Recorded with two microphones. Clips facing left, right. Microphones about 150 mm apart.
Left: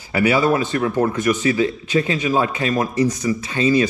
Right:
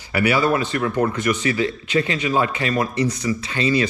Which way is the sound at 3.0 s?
10° left (ahead or behind).